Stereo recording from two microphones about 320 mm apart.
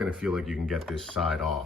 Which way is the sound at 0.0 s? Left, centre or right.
Centre.